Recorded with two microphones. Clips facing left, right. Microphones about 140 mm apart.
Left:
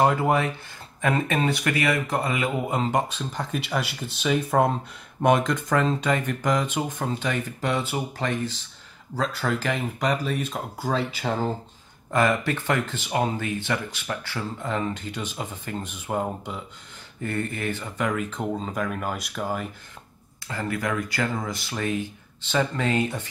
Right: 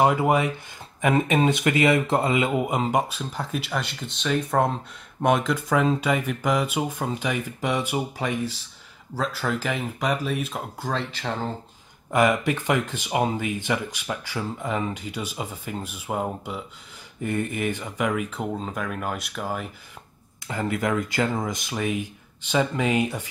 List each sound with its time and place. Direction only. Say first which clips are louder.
0.0 s speech: right 1 dB; 10° right (ahead or behind)
2.8 s speech: right 1 dB; 10° right (ahead or behind); by 11.5 s 10° left (ahead or behind)
12.1 s speech: right 2 dB; 15° right (ahead or behind)
17.2 s speech: right 2 dB; 15° right (ahead or behind)
20.4 s speech: right 3 dB; 20° right (ahead or behind)